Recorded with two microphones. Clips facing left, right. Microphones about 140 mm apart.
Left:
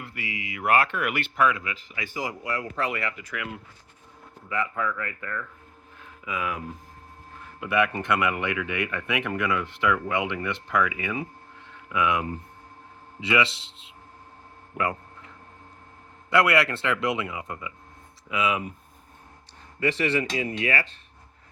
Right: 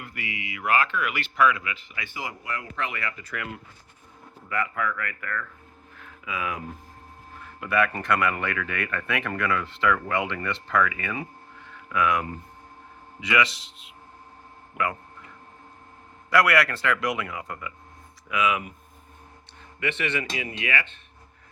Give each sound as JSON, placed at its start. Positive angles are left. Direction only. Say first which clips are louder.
{"t": 0.0, "sound": "speech", "louder": "even", "side_deg": 30}
{"t": 1.5, "sound": "speech", "louder": "right 1 dB", "side_deg": 40}
{"t": 3.2, "sound": "speech", "louder": "even", "side_deg": 15}
{"t": 7.6, "sound": "speech", "louder": "even", "side_deg": 20}
{"t": 16.3, "sound": "speech", "louder": "even", "side_deg": 25}
{"t": 19.8, "sound": "speech", "louder": "left 4 dB", "side_deg": 35}